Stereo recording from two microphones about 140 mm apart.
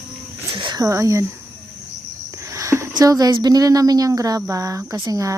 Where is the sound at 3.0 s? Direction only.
25° right (ahead or behind).